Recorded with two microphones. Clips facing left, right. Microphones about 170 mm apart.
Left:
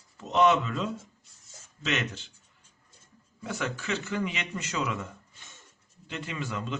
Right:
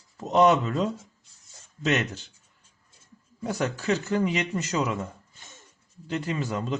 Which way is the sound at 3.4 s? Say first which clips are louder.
Right 5 dB; 40° right (ahead or behind).